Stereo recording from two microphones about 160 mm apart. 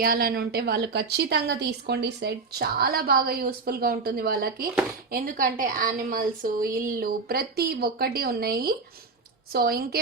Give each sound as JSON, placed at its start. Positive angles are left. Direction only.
{"t": 0.0, "sound": "a woman's voice", "side_deg": -65}